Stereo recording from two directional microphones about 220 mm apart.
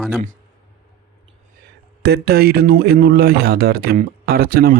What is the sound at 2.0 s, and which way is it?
Speech, 45° right (ahead or behind).